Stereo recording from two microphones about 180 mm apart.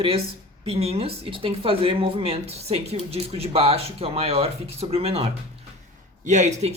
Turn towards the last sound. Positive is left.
turn(degrees=-40)  # may be behind; listen again after turning